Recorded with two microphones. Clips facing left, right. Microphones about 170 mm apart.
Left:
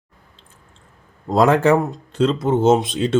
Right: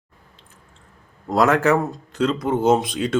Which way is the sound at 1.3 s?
25° left (ahead or behind).